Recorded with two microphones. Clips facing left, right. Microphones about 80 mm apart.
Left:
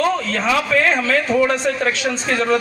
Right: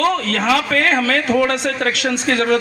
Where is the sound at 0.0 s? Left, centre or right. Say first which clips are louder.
Right 1 dB; right.